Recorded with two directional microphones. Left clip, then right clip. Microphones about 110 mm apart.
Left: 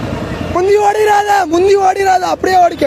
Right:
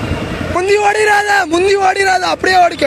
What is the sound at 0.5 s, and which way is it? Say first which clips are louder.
A man's voice: left 1 dB; 30° left (ahead or behind).